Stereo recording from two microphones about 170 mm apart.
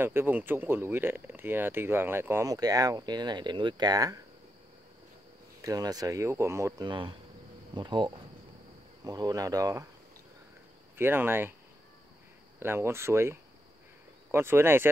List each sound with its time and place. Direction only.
0.0 s speech: 15° right (ahead or behind)
5.6 s speech: 20° right (ahead or behind)
6.9 s speech: 30° right (ahead or behind)
11.0 s speech: 15° right (ahead or behind)
12.5 s speech: 15° right (ahead or behind)